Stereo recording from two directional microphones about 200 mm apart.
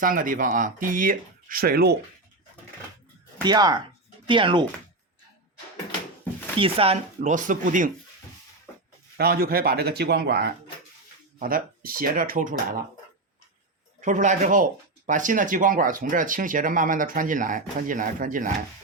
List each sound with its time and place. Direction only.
0.0 s speech: 45° right (ahead or behind)
3.3 s speech: 20° right (ahead or behind)
6.6 s speech: 30° right (ahead or behind)
7.2 s speech: 40° right (ahead or behind)
9.1 s speech: 50° right (ahead or behind)
14.0 s speech: 40° right (ahead or behind)